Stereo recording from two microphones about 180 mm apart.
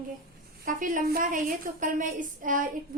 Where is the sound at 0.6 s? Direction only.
45° right (ahead or behind).